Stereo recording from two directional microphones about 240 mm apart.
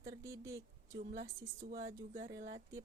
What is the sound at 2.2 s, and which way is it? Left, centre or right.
Speech, centre.